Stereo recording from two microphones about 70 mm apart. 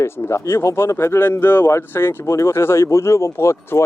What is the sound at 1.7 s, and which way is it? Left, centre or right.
Speech, left.